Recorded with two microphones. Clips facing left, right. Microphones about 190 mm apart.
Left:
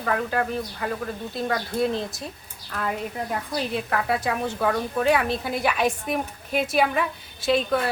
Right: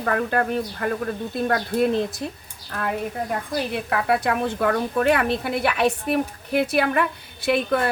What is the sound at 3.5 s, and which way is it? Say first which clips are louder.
A woman's voice: right 1 dB; 60° right (ahead or behind).